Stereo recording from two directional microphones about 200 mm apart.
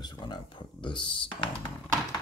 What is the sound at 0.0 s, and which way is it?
Speech, 25° left (ahead or behind).